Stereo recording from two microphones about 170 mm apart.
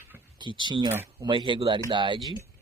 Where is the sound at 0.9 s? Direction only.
15° right (ahead or behind).